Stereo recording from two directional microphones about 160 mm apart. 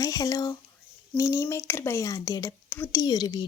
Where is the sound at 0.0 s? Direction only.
20° left (ahead or behind).